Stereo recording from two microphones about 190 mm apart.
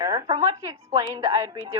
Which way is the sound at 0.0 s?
20° right (ahead or behind).